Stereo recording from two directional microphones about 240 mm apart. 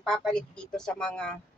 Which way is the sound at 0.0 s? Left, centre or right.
Centre.